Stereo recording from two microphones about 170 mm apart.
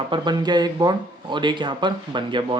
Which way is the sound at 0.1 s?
25° right (ahead or behind).